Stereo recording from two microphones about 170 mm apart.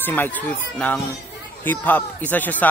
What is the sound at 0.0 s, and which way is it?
Speech, 10° left (ahead or behind).